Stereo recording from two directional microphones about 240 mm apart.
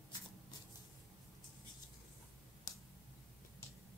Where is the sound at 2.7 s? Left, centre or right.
Centre.